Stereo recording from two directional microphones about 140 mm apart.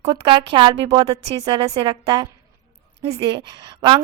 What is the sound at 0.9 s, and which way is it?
A woman's voice, 45° right (ahead or behind).